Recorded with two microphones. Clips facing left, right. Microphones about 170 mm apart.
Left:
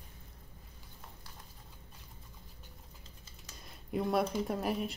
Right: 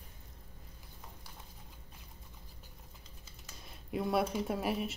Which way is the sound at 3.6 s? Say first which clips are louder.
Left 2 dB; centre (ahead or behind).